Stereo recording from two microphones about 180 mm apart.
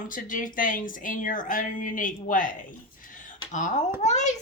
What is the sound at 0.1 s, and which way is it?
A child's voice, 50° left (ahead or behind).